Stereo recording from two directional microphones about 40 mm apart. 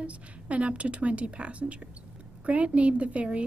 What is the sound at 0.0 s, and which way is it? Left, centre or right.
A woman's voice, right.